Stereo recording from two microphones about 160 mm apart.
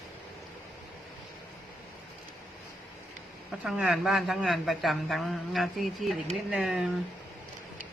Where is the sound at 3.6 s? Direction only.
5° right (ahead or behind).